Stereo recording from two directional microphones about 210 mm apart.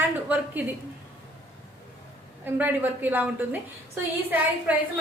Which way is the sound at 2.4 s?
10° right (ahead or behind).